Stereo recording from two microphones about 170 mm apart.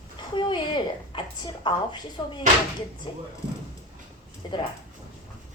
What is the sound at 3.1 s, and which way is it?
Speech, 25° left (ahead or behind).